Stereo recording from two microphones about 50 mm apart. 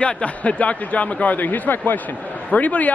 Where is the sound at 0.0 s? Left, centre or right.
Left.